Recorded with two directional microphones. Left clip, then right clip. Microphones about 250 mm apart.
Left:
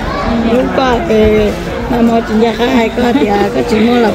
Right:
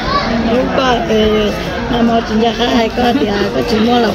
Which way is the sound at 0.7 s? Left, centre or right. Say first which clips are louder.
Left 2 dB; centre.